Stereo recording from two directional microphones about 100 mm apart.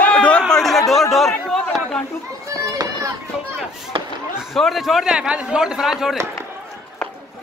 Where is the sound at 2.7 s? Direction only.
35° right (ahead or behind).